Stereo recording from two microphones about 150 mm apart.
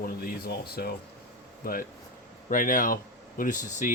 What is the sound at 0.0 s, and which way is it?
Speech, 85° left.